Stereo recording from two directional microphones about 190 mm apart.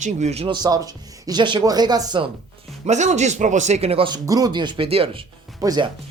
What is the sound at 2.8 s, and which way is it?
A woman's voice, 35° right (ahead or behind).